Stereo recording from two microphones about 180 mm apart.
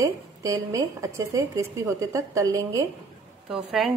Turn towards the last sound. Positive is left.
turn(degrees=-5)  # may be behind; listen again after turning